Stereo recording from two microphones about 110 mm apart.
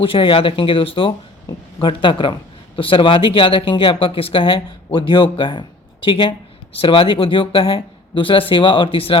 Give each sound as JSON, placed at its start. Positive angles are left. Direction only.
{"t": 0.0, "sound": "speech", "side_deg": 50}